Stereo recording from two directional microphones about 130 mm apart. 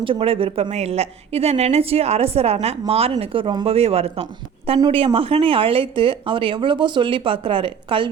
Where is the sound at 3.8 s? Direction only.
50° right (ahead or behind).